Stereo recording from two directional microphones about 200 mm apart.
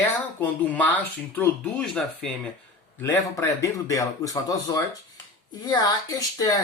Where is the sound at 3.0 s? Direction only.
15° left (ahead or behind).